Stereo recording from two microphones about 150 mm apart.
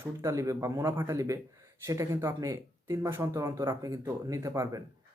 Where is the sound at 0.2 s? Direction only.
20° right (ahead or behind).